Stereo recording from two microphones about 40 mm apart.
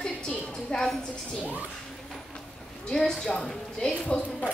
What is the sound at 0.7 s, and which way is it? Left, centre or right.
Speech, left.